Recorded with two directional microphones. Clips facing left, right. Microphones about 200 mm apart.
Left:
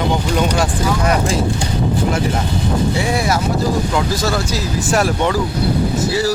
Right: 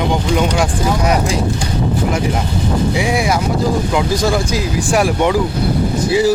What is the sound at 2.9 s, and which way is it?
Speech, 15° right (ahead or behind).